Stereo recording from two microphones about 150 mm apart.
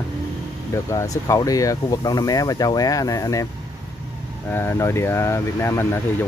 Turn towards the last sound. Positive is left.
turn(degrees=15)  # may be behind; listen again after turning